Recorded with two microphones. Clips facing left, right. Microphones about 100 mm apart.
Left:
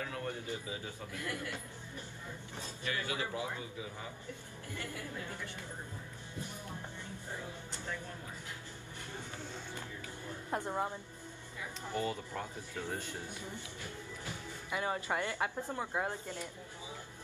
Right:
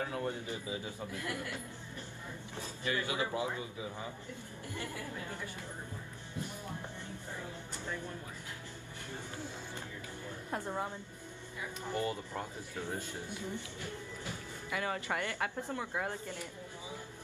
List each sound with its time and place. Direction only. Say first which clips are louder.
0.0 s a man's voice: right 3 dB; 25° right (ahead or behind)
2.8 s speech: right 3 dB; 20° right (ahead or behind)
10.5 s speech: left 2 dB; 20° left (ahead or behind)
11.9 s speech: right 1 dB; 15° right (ahead or behind)
14.7 s speech: left 1 dB; 20° left (ahead or behind)